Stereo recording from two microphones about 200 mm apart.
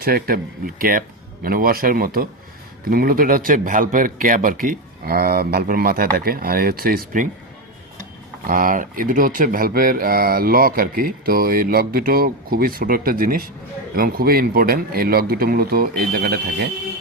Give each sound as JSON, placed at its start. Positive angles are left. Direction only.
{"t": 0.0, "sound": "speech", "side_deg": -50}
{"t": 8.4, "sound": "speech", "side_deg": -45}